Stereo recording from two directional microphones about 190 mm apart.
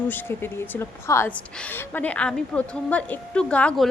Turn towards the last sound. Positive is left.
turn(degrees=5)  # may be behind; listen again after turning